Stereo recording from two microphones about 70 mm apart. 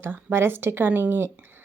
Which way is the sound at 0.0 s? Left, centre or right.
Right.